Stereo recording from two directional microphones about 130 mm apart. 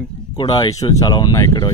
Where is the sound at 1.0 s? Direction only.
30° left (ahead or behind).